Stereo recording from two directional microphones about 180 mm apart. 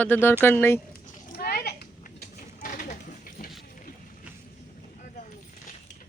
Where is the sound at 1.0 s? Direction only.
55° left (ahead or behind).